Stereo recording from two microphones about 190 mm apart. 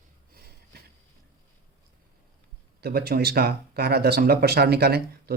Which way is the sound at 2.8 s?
55° right (ahead or behind).